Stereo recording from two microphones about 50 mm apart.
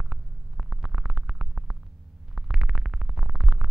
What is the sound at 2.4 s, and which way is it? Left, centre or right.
Synthesizer, centre.